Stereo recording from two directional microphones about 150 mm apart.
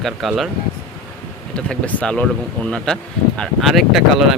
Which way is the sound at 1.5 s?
10° left (ahead or behind).